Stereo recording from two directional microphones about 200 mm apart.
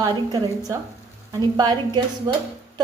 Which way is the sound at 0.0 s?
20° right (ahead or behind).